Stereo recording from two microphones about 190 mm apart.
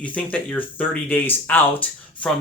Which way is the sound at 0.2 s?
10° left (ahead or behind).